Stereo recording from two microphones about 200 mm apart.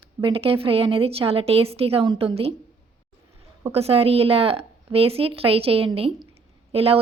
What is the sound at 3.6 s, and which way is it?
A woman's voice, 30° right (ahead or behind).